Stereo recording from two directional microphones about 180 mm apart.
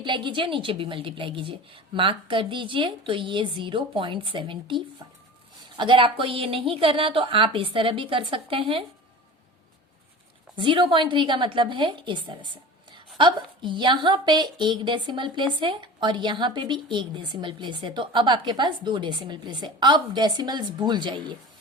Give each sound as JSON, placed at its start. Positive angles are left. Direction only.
{"t": 0.0, "sound": "a woman's voice", "side_deg": -25}
{"t": 10.6, "sound": "a woman's voice", "side_deg": -25}